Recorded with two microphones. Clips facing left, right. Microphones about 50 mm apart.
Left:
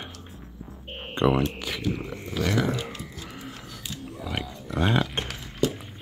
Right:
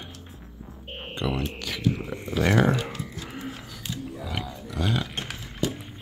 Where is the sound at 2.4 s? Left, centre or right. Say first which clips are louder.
Right 4 dB; right.